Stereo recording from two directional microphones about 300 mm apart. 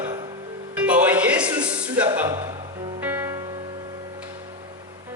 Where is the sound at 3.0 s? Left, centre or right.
Centre.